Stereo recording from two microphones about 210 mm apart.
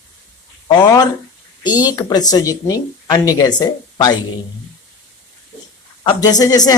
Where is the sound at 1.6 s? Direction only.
20° left (ahead or behind).